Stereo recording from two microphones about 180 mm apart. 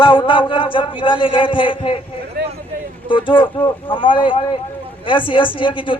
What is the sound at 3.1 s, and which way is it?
A man's voice, 30° left (ahead or behind).